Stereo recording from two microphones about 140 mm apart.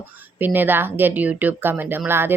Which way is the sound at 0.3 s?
15° right (ahead or behind).